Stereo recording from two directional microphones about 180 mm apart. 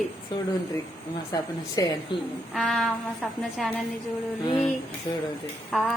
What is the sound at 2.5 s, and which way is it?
A woman's voice, centre (ahead or behind).